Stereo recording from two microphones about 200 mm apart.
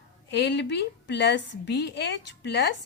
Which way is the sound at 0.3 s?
60° left (ahead or behind).